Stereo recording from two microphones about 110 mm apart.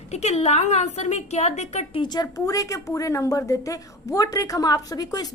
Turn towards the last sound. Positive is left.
turn(degrees=35)  # may be behind; listen again after turning